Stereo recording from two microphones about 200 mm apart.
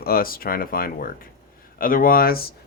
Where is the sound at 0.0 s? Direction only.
50° left (ahead or behind).